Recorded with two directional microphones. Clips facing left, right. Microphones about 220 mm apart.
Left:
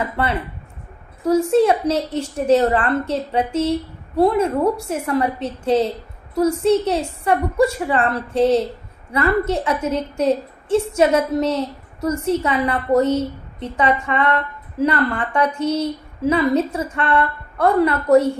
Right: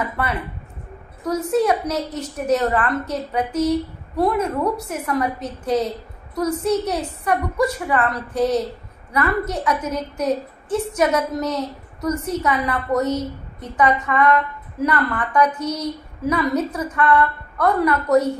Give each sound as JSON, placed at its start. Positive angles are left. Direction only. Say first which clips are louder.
{"t": 0.0, "sound": "a woman's voice", "louder": "left 3 dB", "side_deg": 30}